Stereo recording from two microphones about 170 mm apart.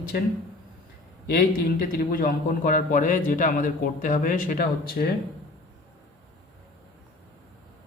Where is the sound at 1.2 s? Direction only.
55° left (ahead or behind).